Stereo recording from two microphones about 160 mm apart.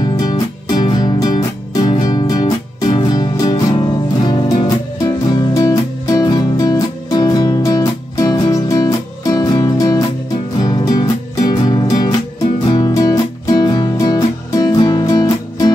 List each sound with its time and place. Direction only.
0.2 s music: 25° left (ahead or behind)